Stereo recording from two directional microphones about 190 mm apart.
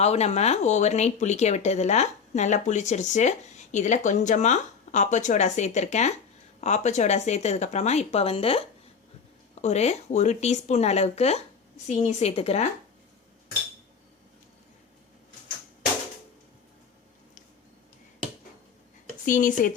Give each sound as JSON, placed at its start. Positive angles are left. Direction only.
{"t": 0.0, "sound": "speech", "side_deg": 35}
{"t": 19.2, "sound": "speech", "side_deg": 45}